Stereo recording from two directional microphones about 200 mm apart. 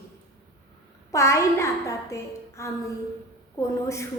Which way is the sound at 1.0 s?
15° left (ahead or behind).